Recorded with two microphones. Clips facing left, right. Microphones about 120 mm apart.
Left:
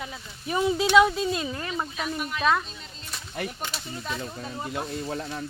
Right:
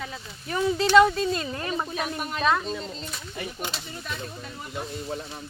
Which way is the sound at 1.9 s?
50° right (ahead or behind).